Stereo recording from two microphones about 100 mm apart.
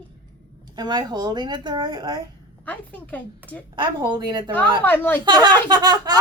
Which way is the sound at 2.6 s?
15° left (ahead or behind).